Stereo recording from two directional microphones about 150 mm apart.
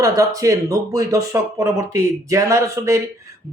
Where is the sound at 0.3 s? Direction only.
20° right (ahead or behind).